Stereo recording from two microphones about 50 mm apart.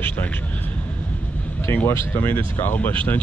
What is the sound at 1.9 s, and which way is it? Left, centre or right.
Speech, left.